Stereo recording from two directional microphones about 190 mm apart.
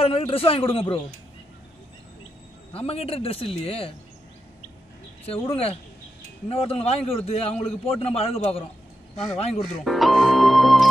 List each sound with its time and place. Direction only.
0.0 s a man's voice: 30° left (ahead or behind)
2.7 s a man's voice: 30° left (ahead or behind)
5.2 s a man's voice: 30° left (ahead or behind)
9.8 s music: centre (ahead or behind)